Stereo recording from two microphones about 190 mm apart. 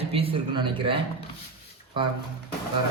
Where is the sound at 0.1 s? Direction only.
30° right (ahead or behind).